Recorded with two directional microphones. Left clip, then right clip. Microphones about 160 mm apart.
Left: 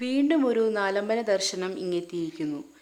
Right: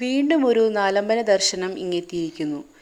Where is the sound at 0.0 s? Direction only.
25° right (ahead or behind).